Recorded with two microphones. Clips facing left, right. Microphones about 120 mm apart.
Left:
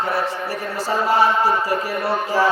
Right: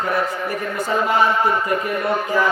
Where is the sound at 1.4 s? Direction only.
35° left (ahead or behind).